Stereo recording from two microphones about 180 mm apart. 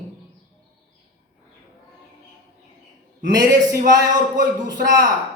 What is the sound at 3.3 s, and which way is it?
Speech, 20° right (ahead or behind).